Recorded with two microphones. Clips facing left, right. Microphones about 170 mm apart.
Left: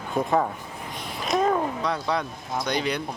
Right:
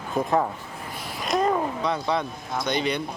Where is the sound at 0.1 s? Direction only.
Centre (ahead or behind).